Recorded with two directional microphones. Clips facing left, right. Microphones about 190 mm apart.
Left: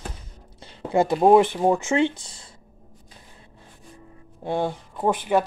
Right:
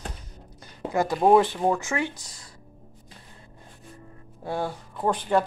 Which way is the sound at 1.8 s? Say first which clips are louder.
Left 7 dB; 25° left (ahead or behind).